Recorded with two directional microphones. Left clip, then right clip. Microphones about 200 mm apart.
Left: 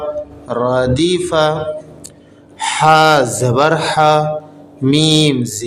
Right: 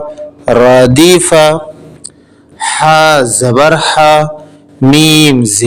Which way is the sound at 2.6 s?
25° right (ahead or behind).